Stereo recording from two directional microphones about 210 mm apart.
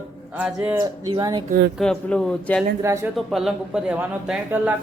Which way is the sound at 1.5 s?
50° right (ahead or behind).